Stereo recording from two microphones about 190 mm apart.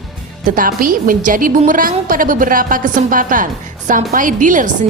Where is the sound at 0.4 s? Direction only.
45° right (ahead or behind).